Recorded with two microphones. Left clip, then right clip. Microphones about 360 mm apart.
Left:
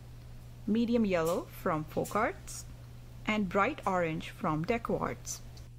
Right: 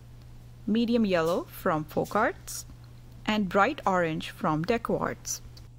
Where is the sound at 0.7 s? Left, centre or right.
Centre.